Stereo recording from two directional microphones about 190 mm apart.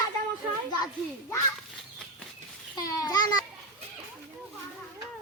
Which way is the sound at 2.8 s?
20° left (ahead or behind).